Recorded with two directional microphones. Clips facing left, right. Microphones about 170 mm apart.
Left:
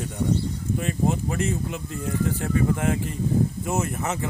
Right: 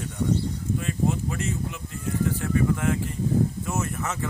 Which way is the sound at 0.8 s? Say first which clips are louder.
Left 2 dB; 30° left (ahead or behind).